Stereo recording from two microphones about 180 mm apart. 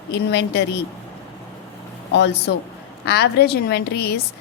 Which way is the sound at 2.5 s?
70° left (ahead or behind).